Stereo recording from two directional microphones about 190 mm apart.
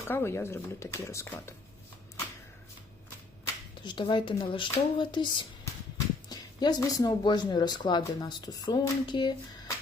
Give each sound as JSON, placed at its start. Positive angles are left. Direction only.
{"t": 0.1, "sound": "speech", "side_deg": 15}
{"t": 3.4, "sound": "speech", "side_deg": 25}